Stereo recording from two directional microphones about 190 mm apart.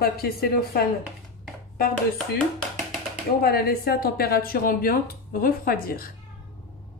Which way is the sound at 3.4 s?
55° left (ahead or behind).